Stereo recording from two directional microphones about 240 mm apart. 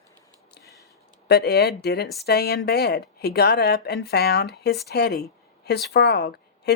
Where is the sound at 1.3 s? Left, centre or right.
Left.